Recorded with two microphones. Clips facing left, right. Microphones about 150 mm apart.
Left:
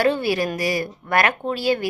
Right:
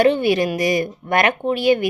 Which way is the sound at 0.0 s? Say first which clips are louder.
Right 4 dB; 20° right (ahead or behind).